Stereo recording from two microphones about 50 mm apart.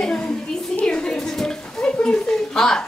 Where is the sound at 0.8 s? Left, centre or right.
Centre.